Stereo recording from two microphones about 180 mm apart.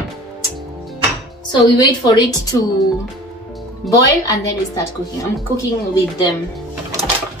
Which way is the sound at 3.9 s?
20° left (ahead or behind).